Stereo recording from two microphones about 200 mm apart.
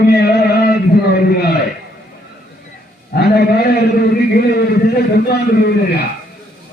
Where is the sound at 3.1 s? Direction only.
55° left (ahead or behind).